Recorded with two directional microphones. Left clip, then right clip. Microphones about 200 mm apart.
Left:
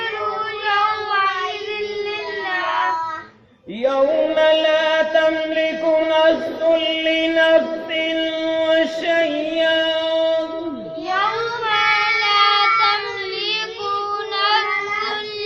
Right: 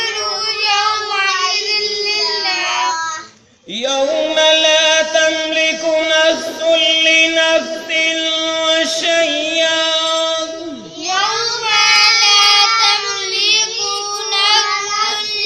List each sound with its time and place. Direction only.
3.8 s music: 10° right (ahead or behind)
11.9 s child singing: 40° right (ahead or behind)
14.3 s child singing: 40° right (ahead or behind)